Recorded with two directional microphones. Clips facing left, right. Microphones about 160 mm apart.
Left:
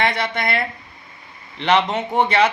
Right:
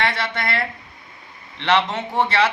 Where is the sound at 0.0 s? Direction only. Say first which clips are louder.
Left 2 dB; 15° left (ahead or behind).